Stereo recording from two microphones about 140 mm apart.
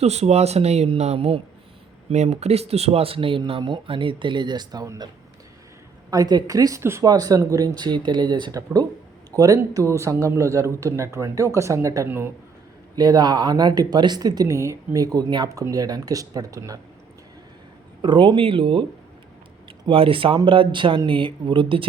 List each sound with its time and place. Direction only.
0.0 s speech: 50° right (ahead or behind); by 5.0 s 30° right (ahead or behind)
6.1 s a man's voice: 30° right (ahead or behind)
13.0 s a man's voice: 30° right (ahead or behind)
18.0 s speech: 35° right (ahead or behind)
19.9 s speech: 40° right (ahead or behind)